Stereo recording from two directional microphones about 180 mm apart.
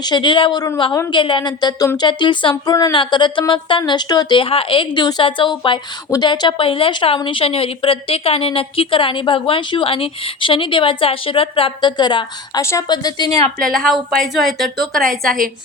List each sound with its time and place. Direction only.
0.0 s speech: 25° left (ahead or behind)
13.7 s a woman's voice: centre (ahead or behind)